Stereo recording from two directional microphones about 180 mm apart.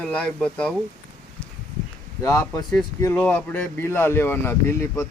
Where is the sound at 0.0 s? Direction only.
5° left (ahead or behind).